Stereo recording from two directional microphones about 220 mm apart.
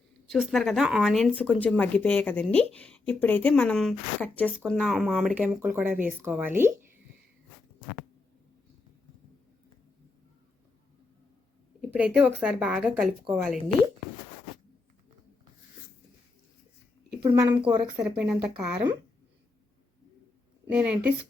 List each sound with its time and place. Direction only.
0.3 s speech: centre (ahead or behind)
11.8 s a woman's voice: 5° right (ahead or behind)
17.2 s a woman's voice: 20° right (ahead or behind)
18.2 s speech: 5° right (ahead or behind)
20.7 s speech: 5° right (ahead or behind)